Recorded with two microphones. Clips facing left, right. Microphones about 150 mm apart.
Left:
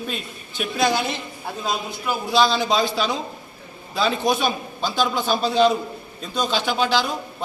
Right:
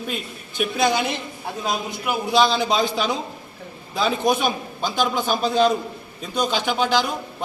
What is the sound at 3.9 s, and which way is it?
A man's voice, 10° right (ahead or behind).